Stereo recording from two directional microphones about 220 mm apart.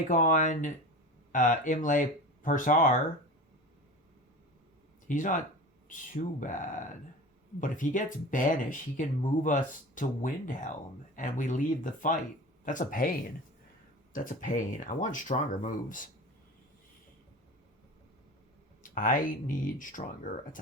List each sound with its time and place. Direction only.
0.1 s speech: 35° left (ahead or behind)
5.0 s speech: 35° left (ahead or behind)
6.4 s speech: 35° left (ahead or behind)
18.8 s speech: 40° left (ahead or behind)